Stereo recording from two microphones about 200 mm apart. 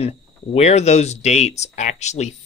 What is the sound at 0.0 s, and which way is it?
Speech, 30° left (ahead or behind).